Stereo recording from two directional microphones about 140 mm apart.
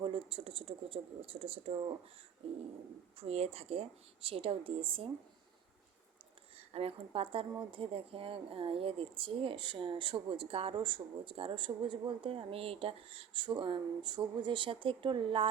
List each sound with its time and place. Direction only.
0.0 s speech: 40° right (ahead or behind)
3.2 s speech: 45° right (ahead or behind)
6.7 s speech: 45° right (ahead or behind)